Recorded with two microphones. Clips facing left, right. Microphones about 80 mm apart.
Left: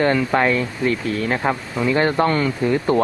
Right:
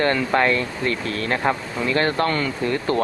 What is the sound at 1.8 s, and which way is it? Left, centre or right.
Speech, centre.